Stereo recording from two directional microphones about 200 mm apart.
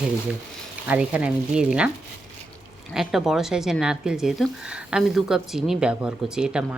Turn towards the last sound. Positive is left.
turn(degrees=-5)  # may be behind; listen again after turning